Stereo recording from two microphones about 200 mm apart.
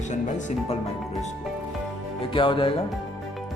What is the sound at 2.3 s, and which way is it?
Speech, 25° left (ahead or behind).